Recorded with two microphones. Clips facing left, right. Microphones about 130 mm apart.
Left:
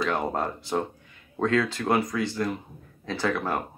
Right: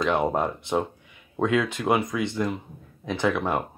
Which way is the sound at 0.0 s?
20° right (ahead or behind).